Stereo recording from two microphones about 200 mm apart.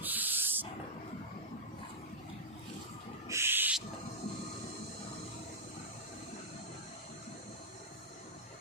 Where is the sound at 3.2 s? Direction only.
10° right (ahead or behind).